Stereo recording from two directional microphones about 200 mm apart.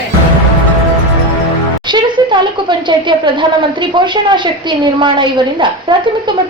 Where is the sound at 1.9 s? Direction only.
25° right (ahead or behind).